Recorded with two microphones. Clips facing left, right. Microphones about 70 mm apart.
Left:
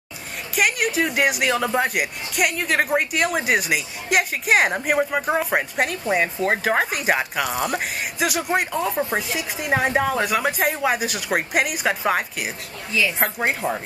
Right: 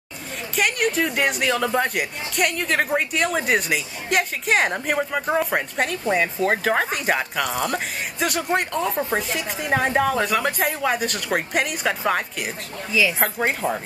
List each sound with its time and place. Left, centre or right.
0.6 s speech: centre
12.9 s a woman's voice: centre